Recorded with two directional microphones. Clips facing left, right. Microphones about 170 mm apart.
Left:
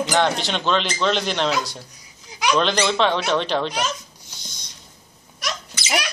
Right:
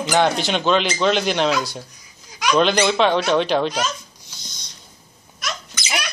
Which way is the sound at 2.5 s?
5° right (ahead or behind).